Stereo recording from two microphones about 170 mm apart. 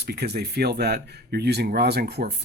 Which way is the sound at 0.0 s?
70° right (ahead or behind).